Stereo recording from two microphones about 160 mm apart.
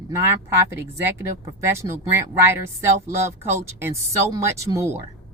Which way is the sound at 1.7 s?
20° right (ahead or behind).